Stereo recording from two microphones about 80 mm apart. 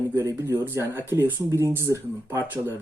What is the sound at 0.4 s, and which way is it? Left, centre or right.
Speech, right.